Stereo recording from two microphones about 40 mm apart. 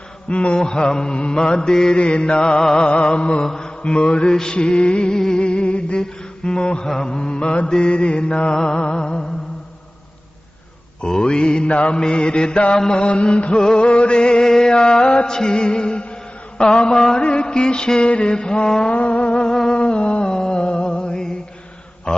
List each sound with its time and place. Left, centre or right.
0.3 s mantra: left
2.0 s mantra: left
3.4 s mantra: centre
6.8 s mantra: centre
7.1 s mantra: left
11.0 s mantra: centre
15.4 s music: left
16.6 s mantra: centre
18.9 s a sound: left
19.5 s a sound: centre
19.8 s a sound: left